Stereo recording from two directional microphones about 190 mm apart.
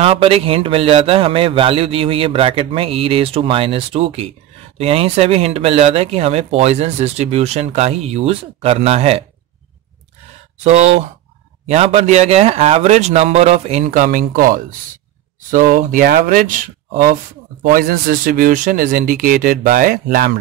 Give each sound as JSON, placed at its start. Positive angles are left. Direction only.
{"t": 0.0, "sound": "a man's voice", "side_deg": -30}
{"t": 10.6, "sound": "speech", "side_deg": -35}